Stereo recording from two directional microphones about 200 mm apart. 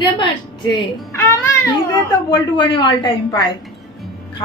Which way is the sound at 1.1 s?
15° left (ahead or behind).